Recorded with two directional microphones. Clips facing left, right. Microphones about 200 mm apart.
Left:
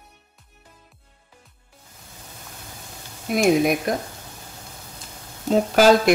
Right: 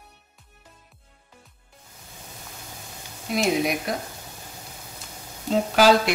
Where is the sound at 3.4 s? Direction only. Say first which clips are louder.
Left 5 dB; 50° left (ahead or behind).